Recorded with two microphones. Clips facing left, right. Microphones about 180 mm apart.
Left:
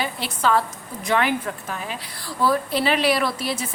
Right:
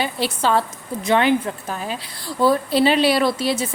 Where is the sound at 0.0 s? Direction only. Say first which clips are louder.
Right 3 dB; 30° right (ahead or behind).